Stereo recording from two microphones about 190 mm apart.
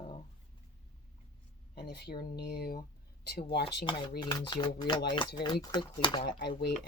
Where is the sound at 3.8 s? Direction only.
25° left (ahead or behind).